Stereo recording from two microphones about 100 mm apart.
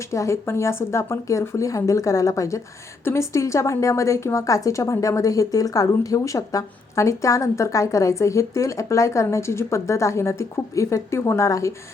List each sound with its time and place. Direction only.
0.1 s a woman's voice: 30° left (ahead or behind)